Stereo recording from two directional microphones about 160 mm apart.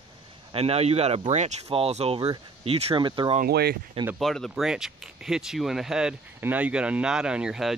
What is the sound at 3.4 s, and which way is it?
Speech, 80° right.